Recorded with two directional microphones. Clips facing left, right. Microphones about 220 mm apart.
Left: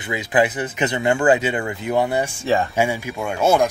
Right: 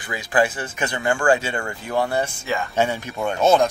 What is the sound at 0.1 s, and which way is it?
Speech, 20° left (ahead or behind).